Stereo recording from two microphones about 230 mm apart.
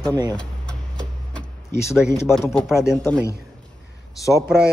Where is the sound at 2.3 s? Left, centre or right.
Centre.